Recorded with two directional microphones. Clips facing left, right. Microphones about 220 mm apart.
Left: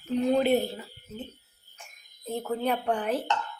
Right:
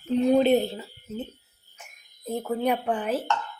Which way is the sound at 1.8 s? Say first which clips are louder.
Right 3 dB; 10° right (ahead or behind).